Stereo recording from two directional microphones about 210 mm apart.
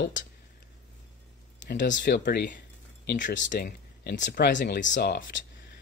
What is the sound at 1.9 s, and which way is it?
Speech, 40° left (ahead or behind).